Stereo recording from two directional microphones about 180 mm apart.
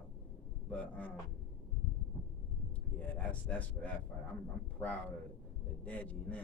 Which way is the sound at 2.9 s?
10° left (ahead or behind).